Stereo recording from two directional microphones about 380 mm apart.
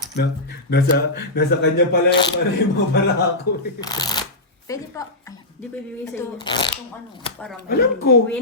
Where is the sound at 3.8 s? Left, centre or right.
Centre.